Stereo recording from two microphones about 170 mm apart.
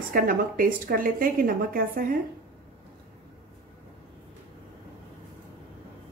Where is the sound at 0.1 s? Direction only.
60° right (ahead or behind).